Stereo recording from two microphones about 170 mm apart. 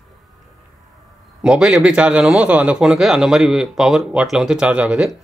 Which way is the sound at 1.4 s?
5° right (ahead or behind).